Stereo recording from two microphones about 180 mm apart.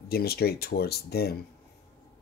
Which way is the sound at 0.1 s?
60° left (ahead or behind).